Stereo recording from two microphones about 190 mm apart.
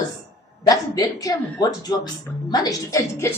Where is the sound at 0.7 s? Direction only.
20° left (ahead or behind).